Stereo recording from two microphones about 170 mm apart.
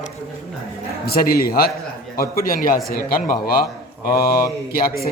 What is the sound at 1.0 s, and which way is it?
Speech, 60° left (ahead or behind).